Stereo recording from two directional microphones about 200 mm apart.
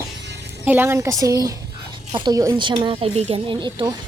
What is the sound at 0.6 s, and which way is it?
A woman's voice, 10° right (ahead or behind).